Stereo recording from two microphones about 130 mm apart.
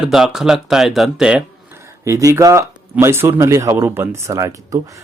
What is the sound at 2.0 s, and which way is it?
Speech, 25° right (ahead or behind).